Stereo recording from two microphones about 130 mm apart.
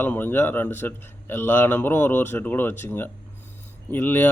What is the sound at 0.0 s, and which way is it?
A man's voice, 15° left (ahead or behind).